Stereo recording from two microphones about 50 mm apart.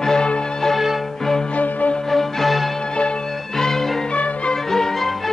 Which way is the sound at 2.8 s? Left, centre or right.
Centre.